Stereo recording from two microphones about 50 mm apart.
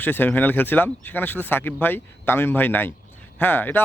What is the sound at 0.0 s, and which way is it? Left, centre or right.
Speech, left.